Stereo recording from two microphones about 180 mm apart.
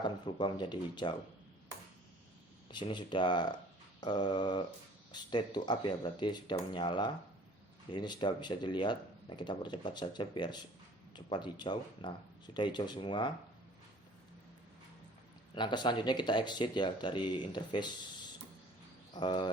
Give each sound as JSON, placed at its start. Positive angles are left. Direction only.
{"t": 0.0, "sound": "speech", "side_deg": 25}
{"t": 2.6, "sound": "speech", "side_deg": 25}
{"t": 15.5, "sound": "speech", "side_deg": 25}
{"t": 19.1, "sound": "speech", "side_deg": 25}